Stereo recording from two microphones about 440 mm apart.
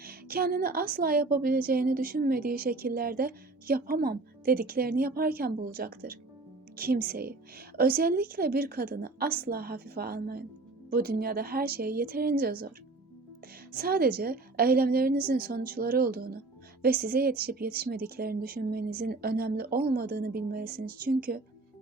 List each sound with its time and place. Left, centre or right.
0.0 s a woman's voice: centre
13.7 s a woman's voice: centre